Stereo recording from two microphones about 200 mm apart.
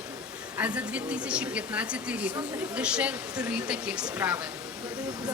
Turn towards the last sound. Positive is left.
turn(degrees=-5)  # may be behind; listen again after turning